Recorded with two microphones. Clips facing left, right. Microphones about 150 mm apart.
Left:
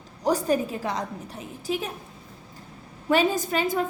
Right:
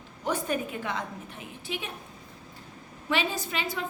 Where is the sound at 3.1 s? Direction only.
45° left (ahead or behind).